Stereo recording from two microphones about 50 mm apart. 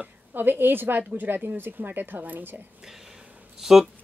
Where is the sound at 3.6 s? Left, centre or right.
Centre.